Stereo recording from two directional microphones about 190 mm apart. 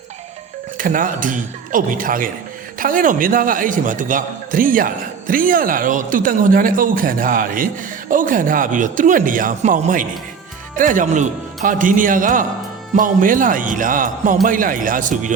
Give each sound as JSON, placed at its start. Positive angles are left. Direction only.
{"t": 0.8, "sound": "speech", "side_deg": -45}